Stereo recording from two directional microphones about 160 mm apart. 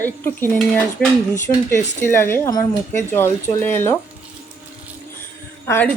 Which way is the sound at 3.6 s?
15° left (ahead or behind).